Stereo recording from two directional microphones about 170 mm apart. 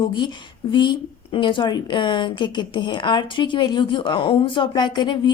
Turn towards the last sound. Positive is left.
turn(degrees=25)  # may be behind; listen again after turning